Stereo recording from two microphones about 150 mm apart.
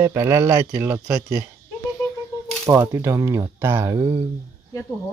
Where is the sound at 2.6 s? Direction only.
20° right (ahead or behind).